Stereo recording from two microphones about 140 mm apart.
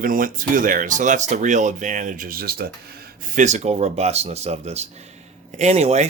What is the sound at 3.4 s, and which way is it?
Speech, 55° right (ahead or behind).